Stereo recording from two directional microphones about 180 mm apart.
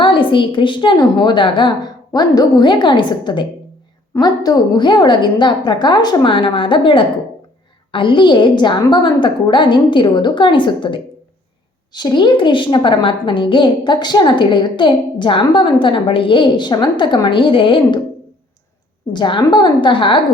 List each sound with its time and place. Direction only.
0.0 s a woman's voice: 30° left (ahead or behind)
19.1 s a woman's voice: 25° left (ahead or behind)